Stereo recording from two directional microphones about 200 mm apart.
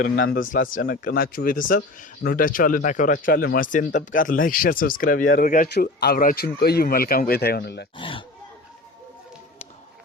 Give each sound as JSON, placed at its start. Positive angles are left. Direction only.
{"t": 0.3, "sound": "a man's voice", "side_deg": 45}
{"t": 7.9, "sound": "speech", "side_deg": 25}